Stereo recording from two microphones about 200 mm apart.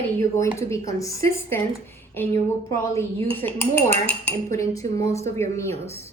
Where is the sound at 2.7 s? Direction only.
15° left (ahead or behind).